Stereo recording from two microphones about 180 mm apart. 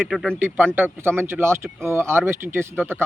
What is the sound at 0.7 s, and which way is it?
A man's voice, 10° right (ahead or behind).